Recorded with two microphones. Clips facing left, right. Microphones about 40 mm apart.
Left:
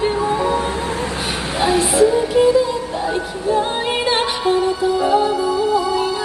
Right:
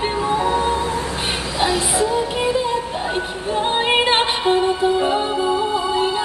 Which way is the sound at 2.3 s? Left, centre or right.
Right.